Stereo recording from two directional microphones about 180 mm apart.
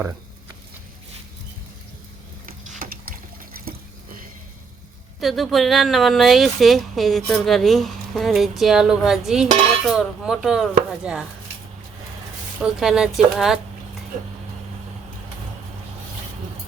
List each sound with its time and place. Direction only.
2.6 s boat: 45° right (ahead or behind)
5.2 s speech: centre (ahead or behind)
12.5 s speech: 5° right (ahead or behind)